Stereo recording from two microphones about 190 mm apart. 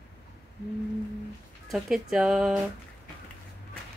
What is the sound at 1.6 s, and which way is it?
Speech, centre (ahead or behind).